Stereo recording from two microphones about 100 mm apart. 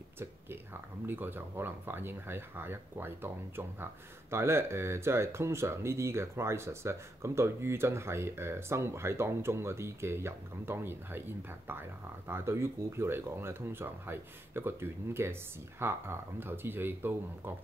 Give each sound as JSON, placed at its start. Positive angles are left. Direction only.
{"t": 1.0, "sound": "speech", "side_deg": -20}